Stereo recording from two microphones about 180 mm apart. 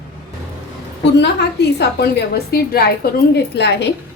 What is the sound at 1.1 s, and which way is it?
A woman's voice, 65° left (ahead or behind).